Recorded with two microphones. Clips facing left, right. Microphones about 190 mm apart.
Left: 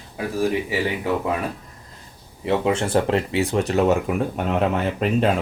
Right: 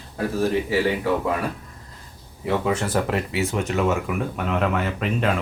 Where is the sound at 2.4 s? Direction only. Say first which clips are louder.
Left 2 dB; 25° left (ahead or behind).